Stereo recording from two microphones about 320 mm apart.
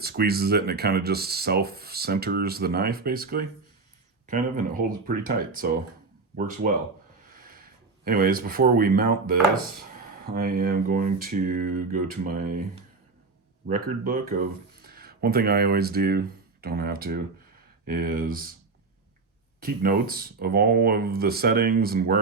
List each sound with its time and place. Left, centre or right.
0.0 s speech: right
13.7 s speech: right
19.6 s speech: right